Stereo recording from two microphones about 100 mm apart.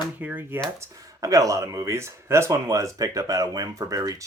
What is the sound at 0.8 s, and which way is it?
Speech, 35° right (ahead or behind).